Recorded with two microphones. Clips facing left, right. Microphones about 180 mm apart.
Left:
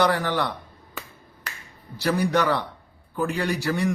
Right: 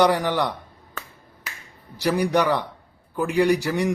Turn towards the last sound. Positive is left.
turn(degrees=-15)  # may be behind; listen again after turning